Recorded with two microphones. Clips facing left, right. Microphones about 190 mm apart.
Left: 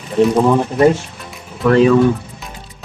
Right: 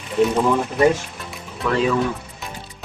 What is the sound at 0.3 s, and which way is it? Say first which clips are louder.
Speech: left 5 dB; 35° left (ahead or behind).